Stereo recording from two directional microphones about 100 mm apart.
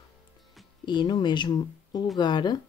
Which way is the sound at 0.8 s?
45° left (ahead or behind).